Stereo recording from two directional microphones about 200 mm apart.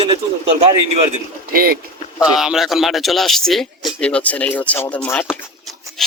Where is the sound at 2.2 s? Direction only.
5° right (ahead or behind).